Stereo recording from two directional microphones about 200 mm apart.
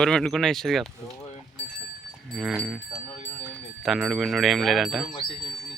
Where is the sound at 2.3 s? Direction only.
Centre (ahead or behind).